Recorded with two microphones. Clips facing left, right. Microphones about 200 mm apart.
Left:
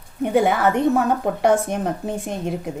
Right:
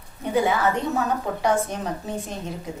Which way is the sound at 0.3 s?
55° left (ahead or behind).